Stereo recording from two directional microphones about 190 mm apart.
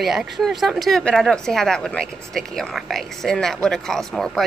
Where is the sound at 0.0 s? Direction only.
Centre (ahead or behind).